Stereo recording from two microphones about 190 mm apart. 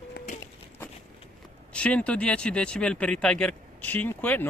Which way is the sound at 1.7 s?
5° left (ahead or behind).